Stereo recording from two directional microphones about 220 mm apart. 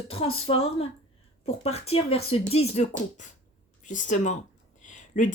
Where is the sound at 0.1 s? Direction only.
25° left (ahead or behind).